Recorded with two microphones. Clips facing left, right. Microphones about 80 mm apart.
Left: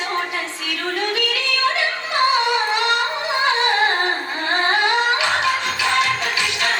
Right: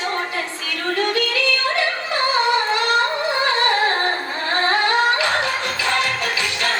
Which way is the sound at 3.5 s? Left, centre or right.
Centre.